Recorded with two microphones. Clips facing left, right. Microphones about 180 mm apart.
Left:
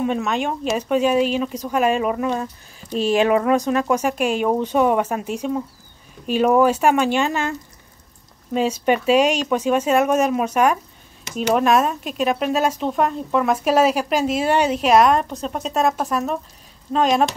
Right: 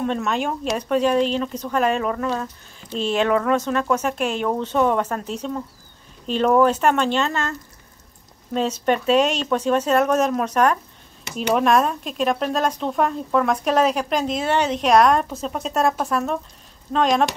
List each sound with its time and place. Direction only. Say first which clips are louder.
0.0 s speech: left 1 dB; 5° left (ahead or behind)
8.5 s speech: left 2 dB; 10° left (ahead or behind)